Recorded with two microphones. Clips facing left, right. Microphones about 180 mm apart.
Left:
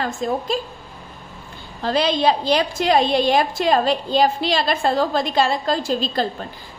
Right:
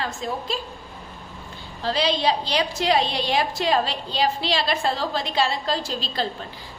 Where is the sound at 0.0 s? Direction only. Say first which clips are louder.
Left 6 dB; 50° left (ahead or behind).